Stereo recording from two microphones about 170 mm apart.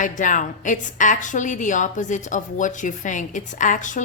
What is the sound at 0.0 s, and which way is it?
A woman's voice, 50° left (ahead or behind).